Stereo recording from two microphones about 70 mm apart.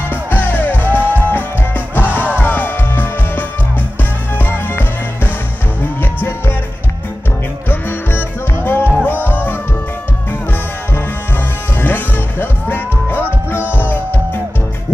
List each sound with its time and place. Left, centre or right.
0.1 s music: left
7.6 s music: left
11.7 s music: left